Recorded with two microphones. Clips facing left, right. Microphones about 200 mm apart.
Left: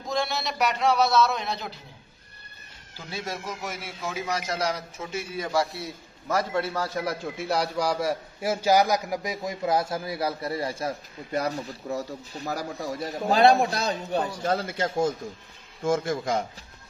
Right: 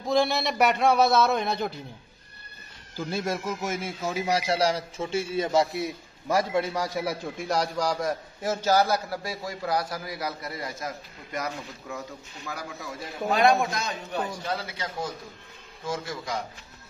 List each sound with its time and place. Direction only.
0.6 s speech: 55° right (ahead or behind)
3.1 s speech: 50° right (ahead or behind)
4.5 s a man's voice: 30° right (ahead or behind); by 7.2 s 10° right (ahead or behind)
7.3 s a man's voice: 5° left (ahead or behind); by 16.4 s 50° left (ahead or behind)